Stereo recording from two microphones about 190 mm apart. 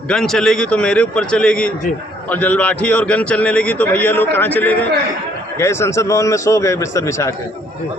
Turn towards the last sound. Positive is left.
turn(degrees=15)  # may be behind; listen again after turning